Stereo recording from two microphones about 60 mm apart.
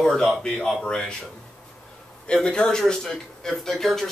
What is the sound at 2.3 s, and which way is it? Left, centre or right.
A man's voice, centre.